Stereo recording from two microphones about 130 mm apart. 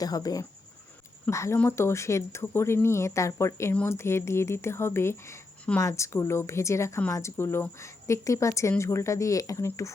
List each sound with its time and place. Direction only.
0.0 s speech: 30° left (ahead or behind)